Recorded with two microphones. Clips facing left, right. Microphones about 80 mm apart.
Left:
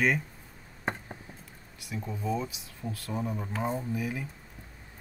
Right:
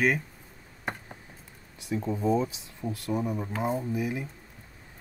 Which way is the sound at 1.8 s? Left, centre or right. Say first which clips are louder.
Right 7 dB; right.